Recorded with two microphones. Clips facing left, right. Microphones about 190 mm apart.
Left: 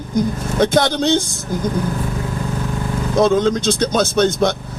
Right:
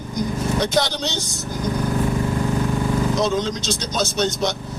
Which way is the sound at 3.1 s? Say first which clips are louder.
Left 7 dB; 55° left (ahead or behind).